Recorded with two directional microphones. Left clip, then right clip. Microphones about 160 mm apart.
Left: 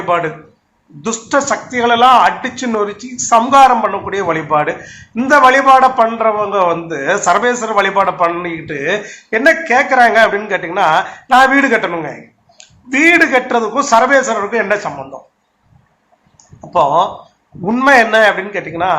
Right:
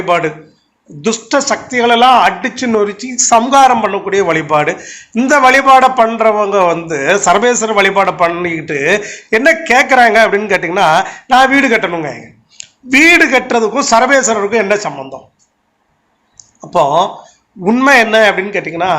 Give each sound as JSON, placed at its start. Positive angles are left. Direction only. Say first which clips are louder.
{"t": 0.0, "sound": "speech", "louder": "right 2 dB", "side_deg": -40}
{"t": 16.6, "sound": "speech", "louder": "right 1 dB", "side_deg": -40}